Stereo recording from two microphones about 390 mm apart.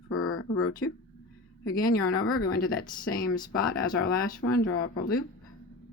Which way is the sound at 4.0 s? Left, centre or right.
Left.